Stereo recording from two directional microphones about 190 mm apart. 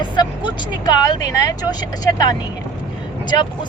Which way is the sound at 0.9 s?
20° left (ahead or behind).